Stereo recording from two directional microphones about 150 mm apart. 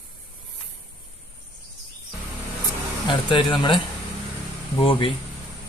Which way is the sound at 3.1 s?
35° left (ahead or behind).